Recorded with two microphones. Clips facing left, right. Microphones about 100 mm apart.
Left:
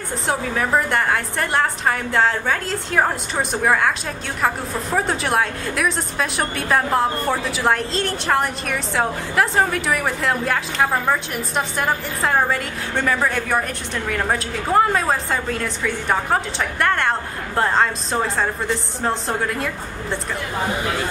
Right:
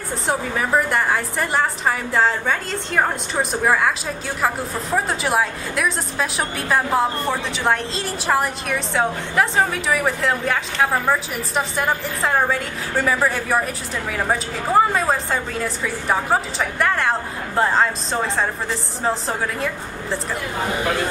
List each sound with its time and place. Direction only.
0.3 s a woman's voice: centre (ahead or behind)